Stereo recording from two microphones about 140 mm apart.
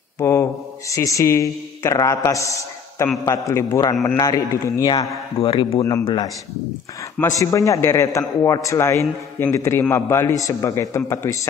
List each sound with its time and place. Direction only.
0.2 s a man's voice: 20° left (ahead or behind)
5.4 s speech: 40° left (ahead or behind)
5.8 s a man's voice: 20° left (ahead or behind)